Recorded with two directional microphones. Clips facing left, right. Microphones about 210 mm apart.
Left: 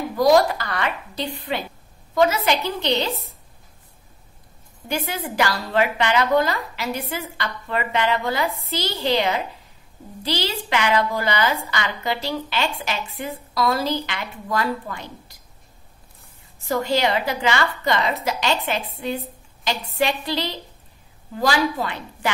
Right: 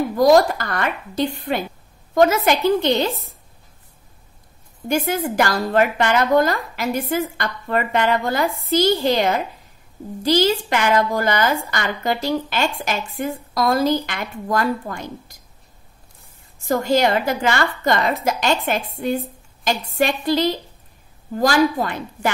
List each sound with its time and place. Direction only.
0.2 s a woman's voice: 45° right (ahead or behind)
4.8 s a woman's voice: 45° right (ahead or behind)
16.6 s a woman's voice: 45° right (ahead or behind)